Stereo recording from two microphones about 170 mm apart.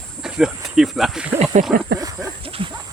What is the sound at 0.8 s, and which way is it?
Speech, centre (ahead or behind).